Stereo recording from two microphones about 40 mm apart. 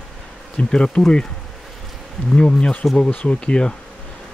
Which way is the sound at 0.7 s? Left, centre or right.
Left.